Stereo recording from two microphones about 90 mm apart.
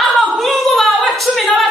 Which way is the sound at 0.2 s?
5° left (ahead or behind).